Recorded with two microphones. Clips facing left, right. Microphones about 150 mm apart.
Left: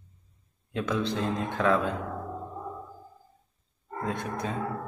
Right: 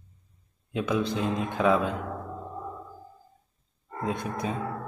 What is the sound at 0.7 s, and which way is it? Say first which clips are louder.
Speech: right 2 dB; 10° right (ahead or behind).